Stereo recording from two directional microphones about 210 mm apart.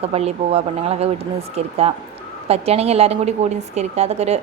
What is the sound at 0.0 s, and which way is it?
A woman's voice, 30° right (ahead or behind).